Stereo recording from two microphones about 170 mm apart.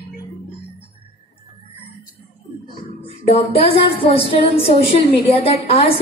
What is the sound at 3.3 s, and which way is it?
Speech, 35° left (ahead or behind).